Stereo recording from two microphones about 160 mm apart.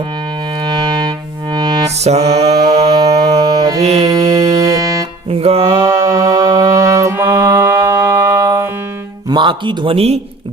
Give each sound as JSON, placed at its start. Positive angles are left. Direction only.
{"t": 0.6, "sound": "music", "side_deg": -25}
{"t": 2.0, "sound": "music", "side_deg": -40}
{"t": 2.6, "sound": "mantra", "side_deg": -25}
{"t": 4.1, "sound": "music", "side_deg": -20}
{"t": 5.3, "sound": "music", "side_deg": -40}
{"t": 5.8, "sound": "mantra", "side_deg": -20}
{"t": 9.3, "sound": "speech", "side_deg": -30}